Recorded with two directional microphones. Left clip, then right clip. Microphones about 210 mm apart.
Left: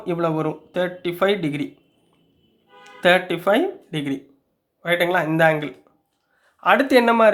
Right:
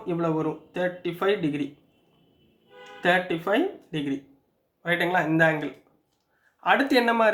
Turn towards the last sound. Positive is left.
turn(degrees=35)  # may be behind; listen again after turning